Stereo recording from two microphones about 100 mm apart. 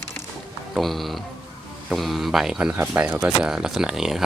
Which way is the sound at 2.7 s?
15° right (ahead or behind).